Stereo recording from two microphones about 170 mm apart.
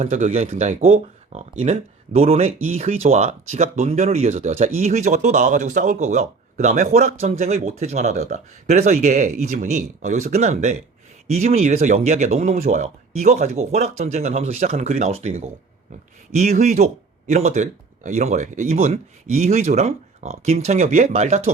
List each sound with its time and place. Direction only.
0.0 s speech: 45° right (ahead or behind)